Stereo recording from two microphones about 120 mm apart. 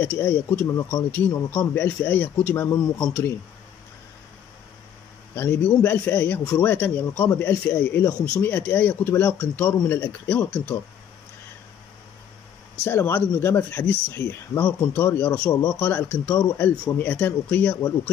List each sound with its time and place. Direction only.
0.0 s a man's voice: 20° left (ahead or behind)
5.3 s a man's voice: 15° left (ahead or behind)
12.8 s a man's voice: 20° left (ahead or behind)